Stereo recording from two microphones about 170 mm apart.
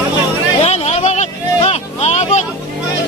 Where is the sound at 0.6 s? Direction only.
40° left (ahead or behind).